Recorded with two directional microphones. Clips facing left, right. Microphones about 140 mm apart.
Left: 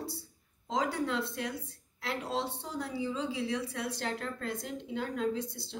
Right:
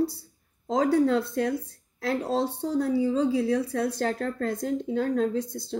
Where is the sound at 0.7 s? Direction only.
45° right (ahead or behind).